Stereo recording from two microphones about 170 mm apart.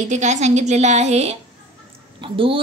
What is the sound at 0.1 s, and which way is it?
A woman's voice, 45° right (ahead or behind).